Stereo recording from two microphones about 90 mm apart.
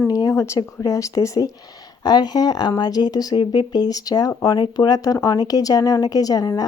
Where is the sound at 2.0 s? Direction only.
50° left (ahead or behind).